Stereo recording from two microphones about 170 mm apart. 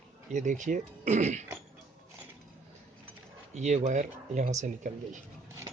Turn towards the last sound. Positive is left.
turn(degrees=-50)  # may be behind; listen again after turning